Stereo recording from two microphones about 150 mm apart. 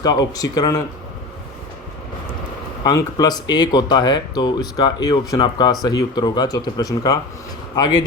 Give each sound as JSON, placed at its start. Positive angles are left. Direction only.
{"t": 0.0, "sound": "speech", "side_deg": 25}
{"t": 2.8, "sound": "speech", "side_deg": 25}